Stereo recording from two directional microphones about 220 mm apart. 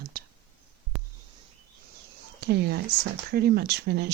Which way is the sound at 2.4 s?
50° right (ahead or behind).